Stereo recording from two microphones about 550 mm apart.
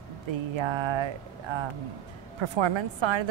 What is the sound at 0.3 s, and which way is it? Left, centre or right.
A woman's voice, right.